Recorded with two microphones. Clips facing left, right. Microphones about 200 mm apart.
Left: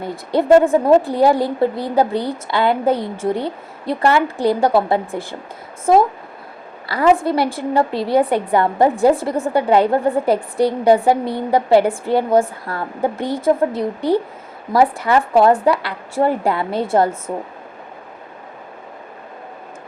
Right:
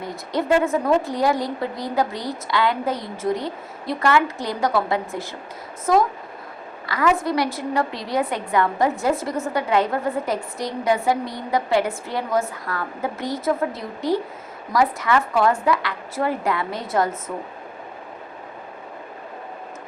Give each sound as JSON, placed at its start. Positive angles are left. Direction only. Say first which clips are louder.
{"t": 0.6, "sound": "a woman's voice", "louder": "left 7 dB", "side_deg": 30}